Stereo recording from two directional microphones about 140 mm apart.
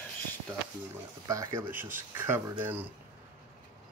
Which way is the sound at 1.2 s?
25° right (ahead or behind).